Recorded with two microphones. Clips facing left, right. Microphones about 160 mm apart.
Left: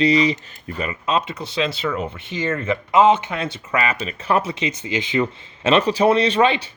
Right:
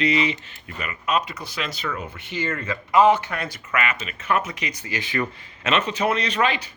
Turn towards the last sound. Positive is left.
turn(degrees=30)  # may be behind; listen again after turning